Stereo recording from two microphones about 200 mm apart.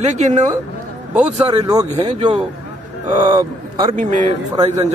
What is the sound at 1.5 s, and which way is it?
Speech, 20° right (ahead or behind).